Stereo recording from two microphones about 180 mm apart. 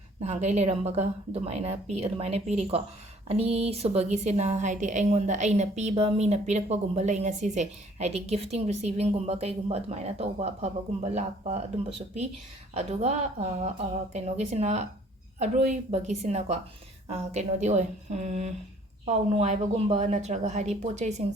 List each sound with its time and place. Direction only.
0.2 s a woman's voice: 40° right (ahead or behind)
12.7 s a woman's voice: 35° right (ahead or behind)